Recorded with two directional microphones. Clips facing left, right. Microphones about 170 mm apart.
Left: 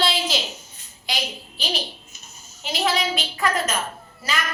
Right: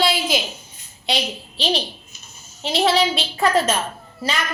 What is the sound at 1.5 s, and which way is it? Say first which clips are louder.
A child's voice: right 8 dB; 25° right (ahead or behind).